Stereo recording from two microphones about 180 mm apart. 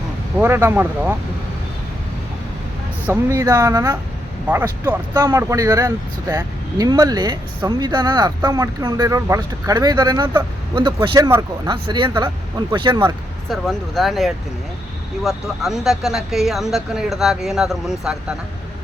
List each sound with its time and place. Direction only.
0.3 s speech: 15° right (ahead or behind)
3.1 s speech: 15° right (ahead or behind)
13.5 s speech: centre (ahead or behind)